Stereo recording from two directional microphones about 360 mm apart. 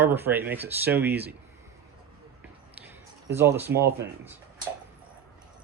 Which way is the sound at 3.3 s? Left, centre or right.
Centre.